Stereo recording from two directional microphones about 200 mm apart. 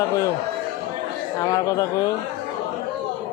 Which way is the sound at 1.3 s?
15° left (ahead or behind).